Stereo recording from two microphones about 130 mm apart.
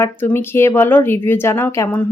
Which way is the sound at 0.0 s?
15° left (ahead or behind).